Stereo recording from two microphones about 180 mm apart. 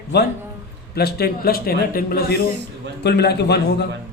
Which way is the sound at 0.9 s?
60° left (ahead or behind).